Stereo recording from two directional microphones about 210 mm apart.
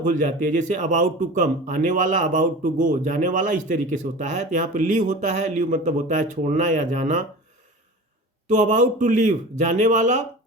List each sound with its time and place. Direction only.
0.0 s speech: 40° right (ahead or behind)
8.4 s speech: 35° right (ahead or behind)